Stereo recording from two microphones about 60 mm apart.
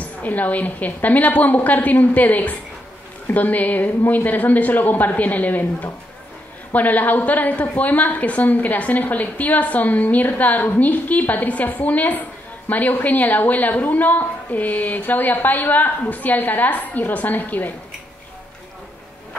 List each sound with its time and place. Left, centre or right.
0.0 s a woman's voice: left